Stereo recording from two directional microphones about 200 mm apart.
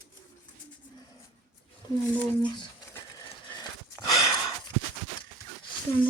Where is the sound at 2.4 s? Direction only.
25° left (ahead or behind).